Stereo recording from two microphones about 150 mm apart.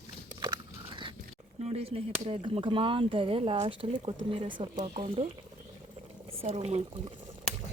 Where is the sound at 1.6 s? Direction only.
40° right (ahead or behind).